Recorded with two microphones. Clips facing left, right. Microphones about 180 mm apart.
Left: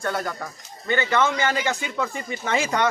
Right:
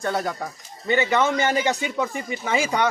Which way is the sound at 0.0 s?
20° right (ahead or behind).